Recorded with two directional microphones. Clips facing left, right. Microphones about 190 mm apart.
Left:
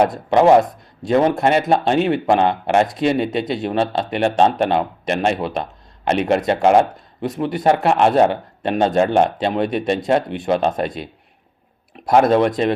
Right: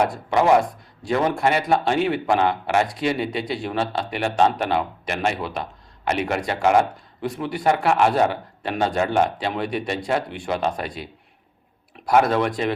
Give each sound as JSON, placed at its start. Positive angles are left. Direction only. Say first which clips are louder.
{"t": 0.1, "sound": "speech", "louder": "left 5 dB", "side_deg": 25}